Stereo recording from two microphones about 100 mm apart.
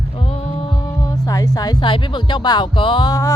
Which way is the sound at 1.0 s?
35° left (ahead or behind).